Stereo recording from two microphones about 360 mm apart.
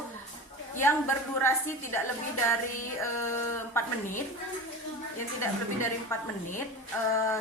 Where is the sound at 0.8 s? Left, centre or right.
Centre.